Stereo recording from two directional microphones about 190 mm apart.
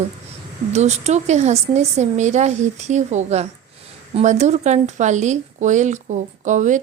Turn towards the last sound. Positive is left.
turn(degrees=-40)  # may be behind; listen again after turning